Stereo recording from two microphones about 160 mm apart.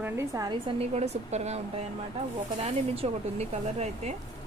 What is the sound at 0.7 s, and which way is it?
Speech, 40° right (ahead or behind).